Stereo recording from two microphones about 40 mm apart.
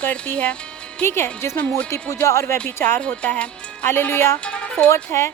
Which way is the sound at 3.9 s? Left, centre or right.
Left.